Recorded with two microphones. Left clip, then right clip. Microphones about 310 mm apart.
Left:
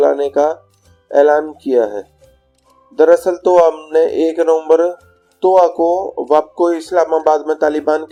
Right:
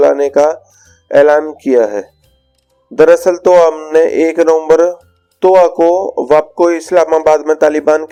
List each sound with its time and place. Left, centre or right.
0.0 s speech: right